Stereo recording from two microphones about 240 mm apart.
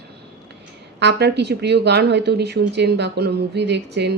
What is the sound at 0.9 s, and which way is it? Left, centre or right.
Speech, right.